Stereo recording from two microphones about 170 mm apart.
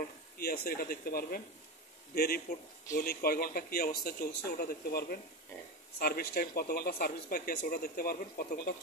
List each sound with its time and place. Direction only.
0.4 s speech: 60° left (ahead or behind)